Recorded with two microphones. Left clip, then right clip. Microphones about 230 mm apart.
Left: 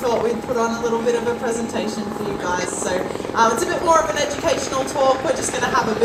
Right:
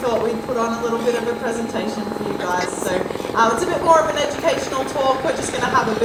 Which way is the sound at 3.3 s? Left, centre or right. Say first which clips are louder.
Even; left.